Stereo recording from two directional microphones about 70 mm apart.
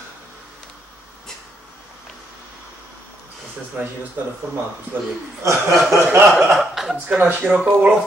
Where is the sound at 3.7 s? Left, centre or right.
Centre.